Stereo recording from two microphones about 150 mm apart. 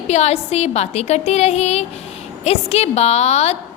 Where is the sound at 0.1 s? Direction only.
45° left (ahead or behind).